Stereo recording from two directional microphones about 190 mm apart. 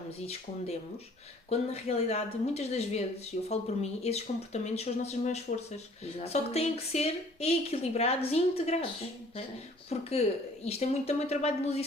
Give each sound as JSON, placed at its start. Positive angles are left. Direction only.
{"t": 1.5, "sound": "speech", "side_deg": 35}
{"t": 9.9, "sound": "speech", "side_deg": 35}